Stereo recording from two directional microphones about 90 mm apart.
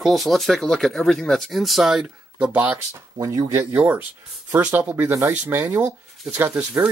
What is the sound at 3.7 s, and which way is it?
Speech, 20° right (ahead or behind).